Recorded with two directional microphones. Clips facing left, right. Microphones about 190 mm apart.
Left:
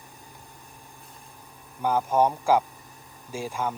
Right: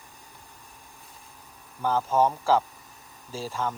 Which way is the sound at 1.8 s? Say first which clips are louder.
Left 1 dB; 15° left (ahead or behind).